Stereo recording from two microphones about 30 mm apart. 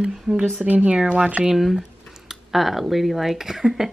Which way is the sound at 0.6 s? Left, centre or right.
Right.